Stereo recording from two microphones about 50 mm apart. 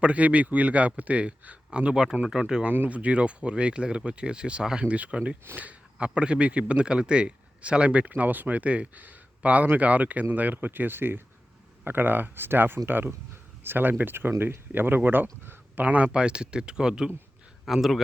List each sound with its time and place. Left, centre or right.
0.0 s a man's voice: right
2.6 s speech: right
3.0 s a man's voice: right
15.8 s speech: right
16.1 s speech: centre
17.7 s speech: centre